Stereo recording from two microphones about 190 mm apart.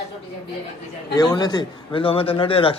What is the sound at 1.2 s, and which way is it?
Speech, 20° left (ahead or behind).